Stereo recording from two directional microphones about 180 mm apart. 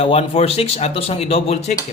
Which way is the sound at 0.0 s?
30° left (ahead or behind).